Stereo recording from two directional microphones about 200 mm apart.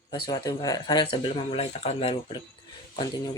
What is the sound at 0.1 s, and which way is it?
A man's voice, 20° left (ahead or behind).